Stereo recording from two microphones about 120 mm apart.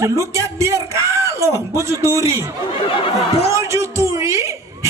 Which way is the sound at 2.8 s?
45° left (ahead or behind).